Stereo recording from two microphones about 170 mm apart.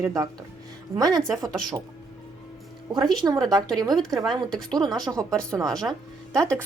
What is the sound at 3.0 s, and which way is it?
Speech, 25° right (ahead or behind).